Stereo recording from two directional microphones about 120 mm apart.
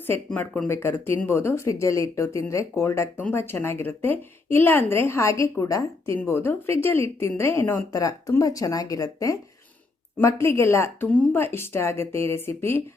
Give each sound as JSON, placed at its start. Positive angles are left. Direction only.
{"t": 0.3, "sound": "a woman's voice", "side_deg": 15}
{"t": 7.9, "sound": "a woman's voice", "side_deg": 30}